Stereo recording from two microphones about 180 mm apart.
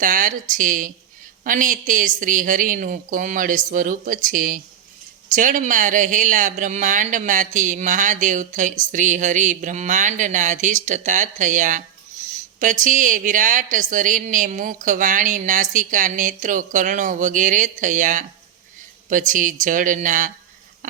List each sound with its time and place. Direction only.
0.0 s speech: 50° right (ahead or behind)